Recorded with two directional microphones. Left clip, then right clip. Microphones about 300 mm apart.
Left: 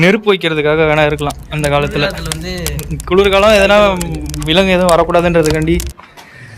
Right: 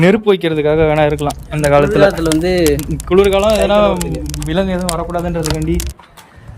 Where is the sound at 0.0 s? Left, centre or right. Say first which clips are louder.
Left 1 dB; centre.